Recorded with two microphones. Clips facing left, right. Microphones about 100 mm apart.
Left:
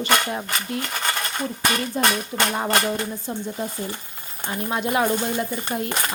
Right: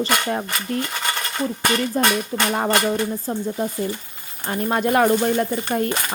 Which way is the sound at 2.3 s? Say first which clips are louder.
Right 1 dB; 25° right (ahead or behind).